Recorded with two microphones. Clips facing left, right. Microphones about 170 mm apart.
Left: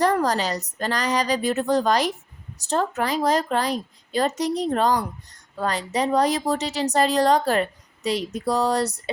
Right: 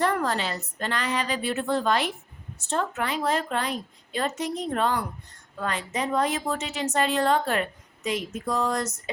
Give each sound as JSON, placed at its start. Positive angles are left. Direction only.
{"t": 0.0, "sound": "a woman's voice", "side_deg": 40}